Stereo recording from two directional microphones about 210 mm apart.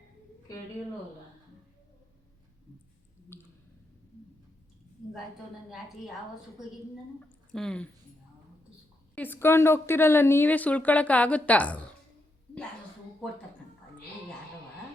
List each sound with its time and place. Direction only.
3.3 s a sound: 10° left (ahead or behind)
7.2 s speech: 5° left (ahead or behind)
9.1 s a woman's voice: 10° left (ahead or behind)